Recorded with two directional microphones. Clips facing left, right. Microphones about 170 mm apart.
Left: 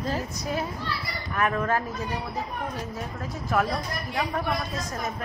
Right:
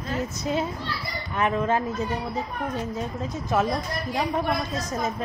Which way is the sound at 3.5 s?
25° right (ahead or behind).